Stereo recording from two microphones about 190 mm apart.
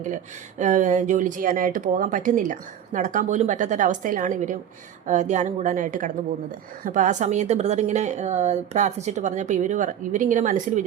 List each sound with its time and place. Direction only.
0.6 s a woman's voice: 40° right (ahead or behind)